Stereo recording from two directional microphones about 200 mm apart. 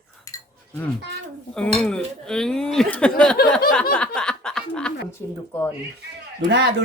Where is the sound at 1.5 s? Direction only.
5° left (ahead or behind).